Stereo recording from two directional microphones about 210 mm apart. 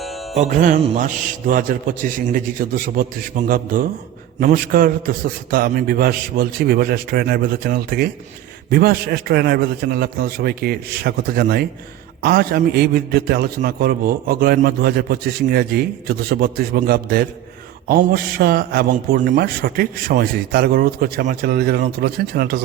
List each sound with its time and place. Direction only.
0.3 s a man's voice: 35° right (ahead or behind)